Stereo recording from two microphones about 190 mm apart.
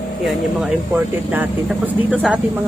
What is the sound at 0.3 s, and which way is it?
Speech, 5° right (ahead or behind).